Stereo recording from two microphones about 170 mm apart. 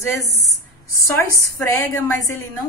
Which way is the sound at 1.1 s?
20° left (ahead or behind).